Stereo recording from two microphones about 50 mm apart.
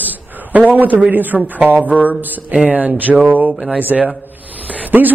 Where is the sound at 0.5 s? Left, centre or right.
Right.